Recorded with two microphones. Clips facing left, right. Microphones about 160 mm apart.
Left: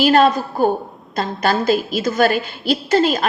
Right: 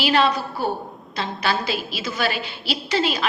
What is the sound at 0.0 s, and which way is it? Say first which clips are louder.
A woman's voice: left 6 dB; 45° left (ahead or behind).